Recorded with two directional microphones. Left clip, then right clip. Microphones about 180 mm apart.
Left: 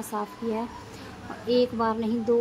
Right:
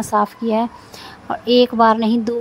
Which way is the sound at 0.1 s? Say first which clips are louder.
Right 13 dB; 50° right (ahead or behind).